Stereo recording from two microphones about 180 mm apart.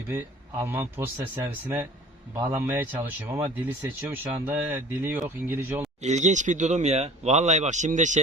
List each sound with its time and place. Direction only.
0.6 s speech: 10° right (ahead or behind)
6.0 s speech: 40° right (ahead or behind)